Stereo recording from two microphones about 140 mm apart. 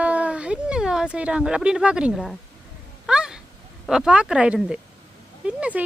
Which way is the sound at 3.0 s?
5° right (ahead or behind).